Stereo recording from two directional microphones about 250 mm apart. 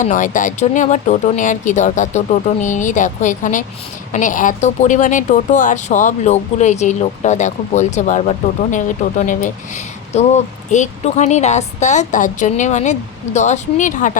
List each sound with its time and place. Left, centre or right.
0.0 s a woman's voice: left